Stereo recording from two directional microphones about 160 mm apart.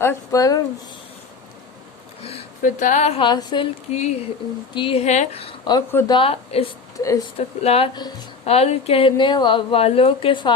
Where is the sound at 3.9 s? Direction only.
45° left (ahead or behind).